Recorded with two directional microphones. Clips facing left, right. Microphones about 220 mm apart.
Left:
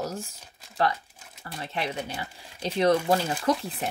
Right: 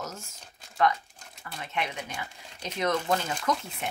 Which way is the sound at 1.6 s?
35° left (ahead or behind).